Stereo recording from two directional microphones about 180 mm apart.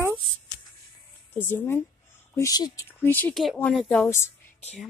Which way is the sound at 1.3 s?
10° left (ahead or behind).